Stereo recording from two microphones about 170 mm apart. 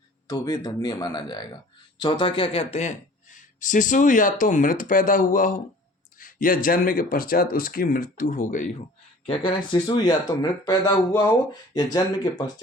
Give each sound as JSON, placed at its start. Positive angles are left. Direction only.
{"t": 0.3, "sound": "a man's voice", "side_deg": 20}
{"t": 9.2, "sound": "speech", "side_deg": 30}